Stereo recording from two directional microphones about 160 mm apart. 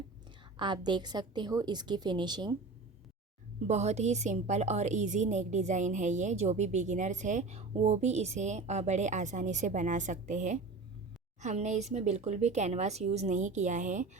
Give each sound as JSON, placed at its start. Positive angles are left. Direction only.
{"t": 0.5, "sound": "a woman's voice", "side_deg": -30}
{"t": 3.7, "sound": "a woman's voice", "side_deg": -45}